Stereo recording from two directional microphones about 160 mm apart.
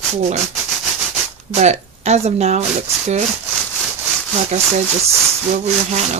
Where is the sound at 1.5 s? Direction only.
45° right (ahead or behind).